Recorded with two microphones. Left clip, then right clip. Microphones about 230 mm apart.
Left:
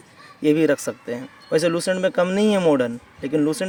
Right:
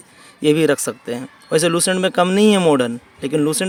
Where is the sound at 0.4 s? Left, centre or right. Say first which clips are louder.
Right 3 dB; right.